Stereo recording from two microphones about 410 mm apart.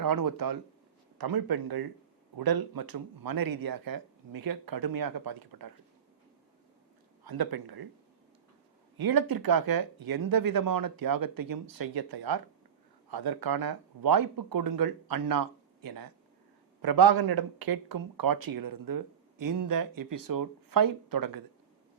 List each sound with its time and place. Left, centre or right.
0.0 s speech: right
7.3 s speech: right
9.0 s speech: right